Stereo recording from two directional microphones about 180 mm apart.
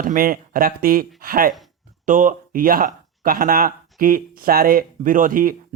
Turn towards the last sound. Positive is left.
turn(degrees=-50)  # may be behind; listen again after turning